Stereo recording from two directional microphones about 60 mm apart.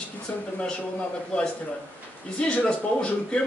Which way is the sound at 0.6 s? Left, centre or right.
Centre.